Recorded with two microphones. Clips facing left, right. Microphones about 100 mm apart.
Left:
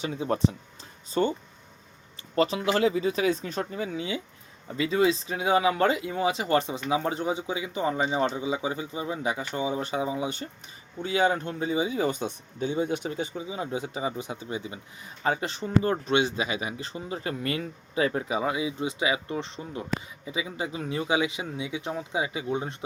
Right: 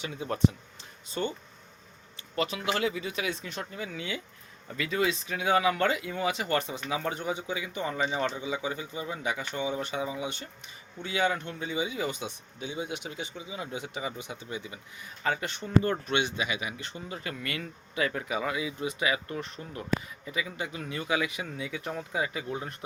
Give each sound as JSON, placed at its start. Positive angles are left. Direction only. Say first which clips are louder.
{"t": 0.0, "sound": "speech", "louder": "left 2 dB", "side_deg": 30}